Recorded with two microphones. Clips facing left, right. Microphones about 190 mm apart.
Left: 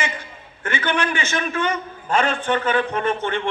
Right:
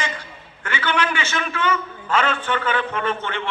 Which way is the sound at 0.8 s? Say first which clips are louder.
Even; 45° left (ahead or behind).